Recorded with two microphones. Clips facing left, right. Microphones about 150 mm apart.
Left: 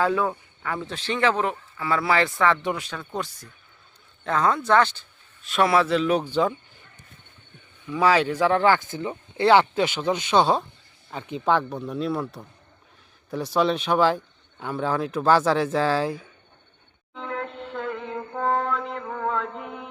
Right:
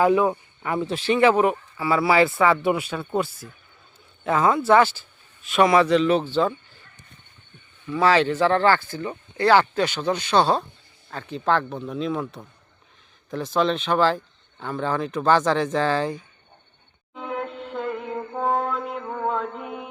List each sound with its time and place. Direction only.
0.0 s speech: 15° right (ahead or behind); by 6.8 s 15° left (ahead or behind)
7.9 s speech: 10° left (ahead or behind)
13.3 s speech: 10° left (ahead or behind)
17.2 s music: 10° right (ahead or behind)